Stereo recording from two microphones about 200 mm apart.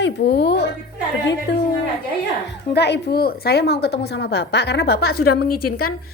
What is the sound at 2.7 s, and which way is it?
A woman's voice, 55° left (ahead or behind).